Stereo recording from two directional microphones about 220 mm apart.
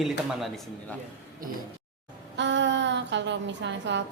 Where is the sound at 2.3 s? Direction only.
55° right (ahead or behind).